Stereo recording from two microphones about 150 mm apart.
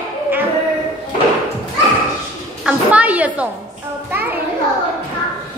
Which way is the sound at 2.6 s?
10° right (ahead or behind).